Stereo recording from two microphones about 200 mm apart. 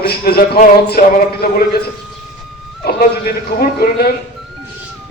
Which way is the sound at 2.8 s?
50° left (ahead or behind).